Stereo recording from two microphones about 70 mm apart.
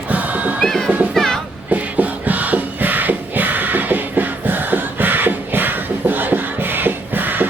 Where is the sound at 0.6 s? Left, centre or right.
Centre.